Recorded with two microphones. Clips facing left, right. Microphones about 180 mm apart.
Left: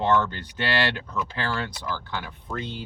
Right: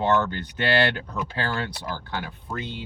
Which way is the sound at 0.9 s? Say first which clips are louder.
Even; 40° right (ahead or behind).